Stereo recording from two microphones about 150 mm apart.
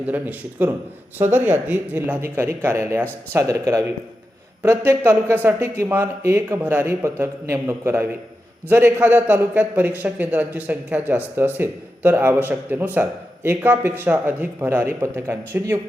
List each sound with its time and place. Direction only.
0.0 s a man's voice: 10° right (ahead or behind)
4.6 s a man's voice: 15° right (ahead or behind)